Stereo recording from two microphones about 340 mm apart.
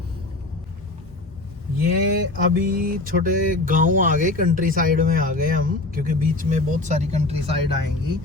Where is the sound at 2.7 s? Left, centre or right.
Right.